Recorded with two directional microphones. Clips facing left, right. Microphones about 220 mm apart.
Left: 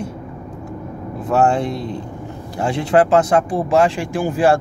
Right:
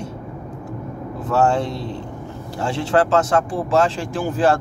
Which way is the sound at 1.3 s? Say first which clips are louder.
Left 2 dB; 15° left (ahead or behind).